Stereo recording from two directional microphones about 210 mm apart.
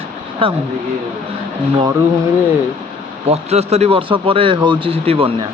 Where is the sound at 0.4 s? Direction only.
25° right (ahead or behind).